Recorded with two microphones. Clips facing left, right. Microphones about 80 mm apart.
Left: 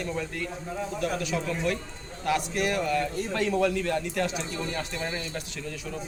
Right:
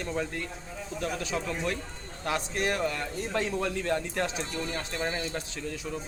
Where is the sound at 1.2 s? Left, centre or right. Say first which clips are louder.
Left 3 dB; right.